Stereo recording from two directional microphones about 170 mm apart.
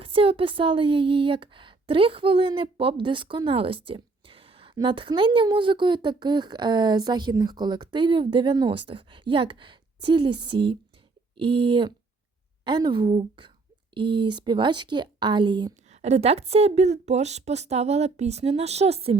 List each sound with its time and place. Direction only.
0.0 s a woman's voice: 35° right (ahead or behind)
15.9 s a woman's voice: 40° right (ahead or behind)